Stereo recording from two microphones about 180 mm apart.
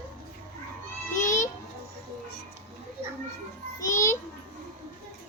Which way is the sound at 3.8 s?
15° left (ahead or behind).